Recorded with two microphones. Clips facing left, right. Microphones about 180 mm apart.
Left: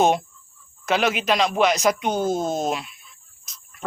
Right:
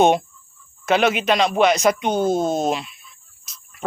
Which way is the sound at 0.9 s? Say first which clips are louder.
Right 3 dB; centre (ahead or behind).